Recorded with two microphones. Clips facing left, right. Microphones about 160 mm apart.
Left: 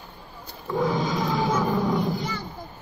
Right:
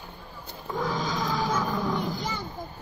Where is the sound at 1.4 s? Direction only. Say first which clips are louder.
Left 4 dB; 10° left (ahead or behind).